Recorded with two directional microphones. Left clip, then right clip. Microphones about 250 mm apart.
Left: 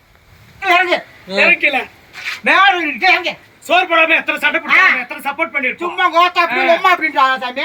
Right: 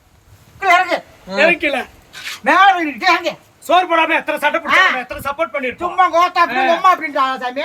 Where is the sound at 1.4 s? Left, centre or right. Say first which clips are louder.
Left 2 dB; centre.